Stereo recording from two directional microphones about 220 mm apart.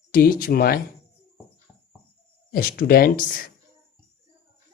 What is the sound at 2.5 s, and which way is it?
Speech, 40° left (ahead or behind).